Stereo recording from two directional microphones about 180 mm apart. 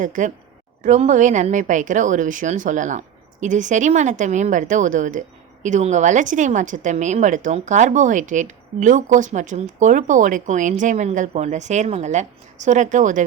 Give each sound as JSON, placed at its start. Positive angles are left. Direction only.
{"t": 0.0, "sound": "a woman's voice", "side_deg": -45}